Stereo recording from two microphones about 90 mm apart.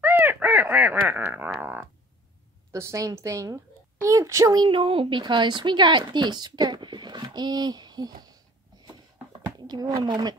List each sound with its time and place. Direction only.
0.0 s crow: 20° right (ahead or behind)
1.6 s a sound: 20° right (ahead or behind)
2.7 s a woman's voice: 35° right (ahead or behind)
4.6 s a woman's voice: 85° right; by 8.4 s 50° right (ahead or behind)
9.6 s a sound: 50° right (ahead or behind)
10.0 s speech: 50° right (ahead or behind)